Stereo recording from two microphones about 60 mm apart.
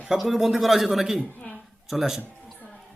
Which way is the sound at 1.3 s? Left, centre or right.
Left.